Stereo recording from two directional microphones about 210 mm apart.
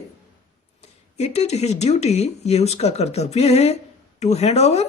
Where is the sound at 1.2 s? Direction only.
30° left (ahead or behind).